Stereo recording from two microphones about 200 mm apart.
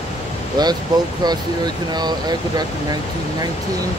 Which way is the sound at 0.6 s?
20° right (ahead or behind).